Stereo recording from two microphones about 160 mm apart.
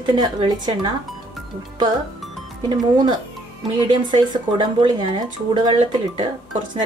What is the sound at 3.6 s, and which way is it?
Speech, 25° right (ahead or behind).